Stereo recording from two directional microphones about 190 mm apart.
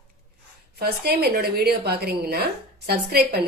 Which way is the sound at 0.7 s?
55° right (ahead or behind).